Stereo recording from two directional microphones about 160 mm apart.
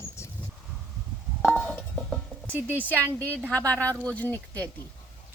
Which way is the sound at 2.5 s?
15° right (ahead or behind).